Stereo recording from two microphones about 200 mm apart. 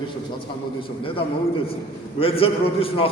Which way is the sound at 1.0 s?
25° left (ahead or behind).